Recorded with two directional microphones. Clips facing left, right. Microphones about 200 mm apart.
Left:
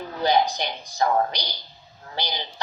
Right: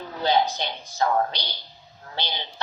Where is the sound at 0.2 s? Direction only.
15° left (ahead or behind).